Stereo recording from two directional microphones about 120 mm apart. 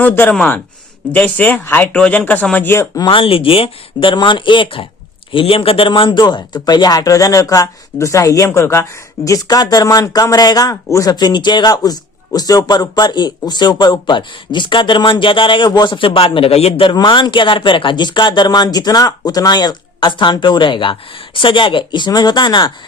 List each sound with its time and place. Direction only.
0.0 s speech: 15° left (ahead or behind)
3.1 s a man's voice: 50° left (ahead or behind)
16.9 s a man's voice: 40° left (ahead or behind)